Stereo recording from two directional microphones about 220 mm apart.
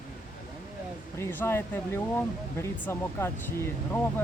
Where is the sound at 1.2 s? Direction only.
10° left (ahead or behind).